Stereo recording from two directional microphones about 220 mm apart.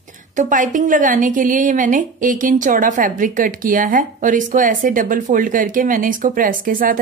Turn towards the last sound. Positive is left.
turn(degrees=-40)  # may be behind; listen again after turning